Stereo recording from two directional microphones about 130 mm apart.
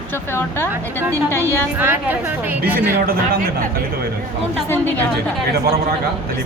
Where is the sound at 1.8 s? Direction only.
15° right (ahead or behind).